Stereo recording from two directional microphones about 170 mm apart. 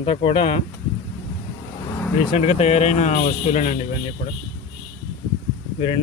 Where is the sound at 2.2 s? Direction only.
30° left (ahead or behind).